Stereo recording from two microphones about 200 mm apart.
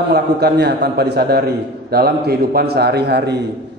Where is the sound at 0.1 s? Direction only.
55° right (ahead or behind).